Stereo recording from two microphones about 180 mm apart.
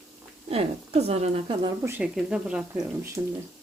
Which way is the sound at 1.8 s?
10° right (ahead or behind).